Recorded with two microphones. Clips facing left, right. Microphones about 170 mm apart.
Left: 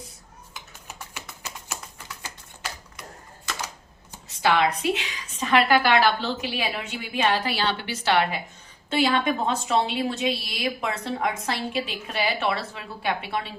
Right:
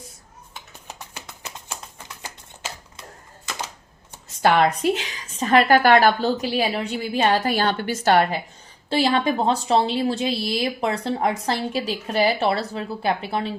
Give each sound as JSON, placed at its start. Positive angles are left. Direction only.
{"t": 1.1, "sound": "a sound", "side_deg": -30}
{"t": 4.4, "sound": "a woman's voice", "side_deg": -45}
{"t": 8.9, "sound": "a woman's voice", "side_deg": -35}